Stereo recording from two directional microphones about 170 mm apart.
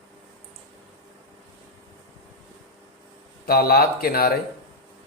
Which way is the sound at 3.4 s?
65° left (ahead or behind).